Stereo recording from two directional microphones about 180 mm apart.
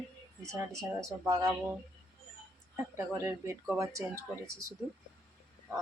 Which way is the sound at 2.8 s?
15° right (ahead or behind).